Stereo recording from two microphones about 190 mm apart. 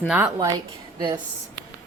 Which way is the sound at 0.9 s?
25° right (ahead or behind).